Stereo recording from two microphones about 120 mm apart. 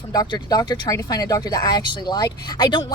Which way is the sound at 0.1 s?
35° left (ahead or behind).